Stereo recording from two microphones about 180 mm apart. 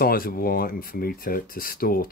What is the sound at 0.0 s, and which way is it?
Speech, 55° left (ahead or behind).